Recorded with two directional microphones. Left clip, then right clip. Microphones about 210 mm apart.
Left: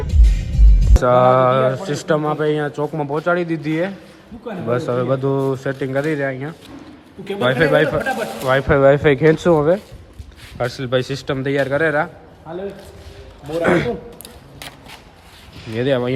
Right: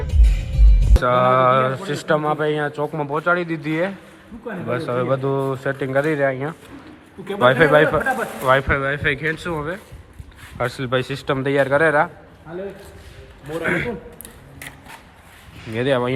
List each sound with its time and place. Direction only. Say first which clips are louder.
1.0 s speech: left 3 dB; 15° left (ahead or behind)
8.7 s speech: left 8 dB; 25° left (ahead or behind)
10.6 s speech: left 2 dB; 10° left (ahead or behind)
13.7 s speech: left 5 dB; 25° left (ahead or behind)
15.7 s speech: left 1 dB; 10° left (ahead or behind)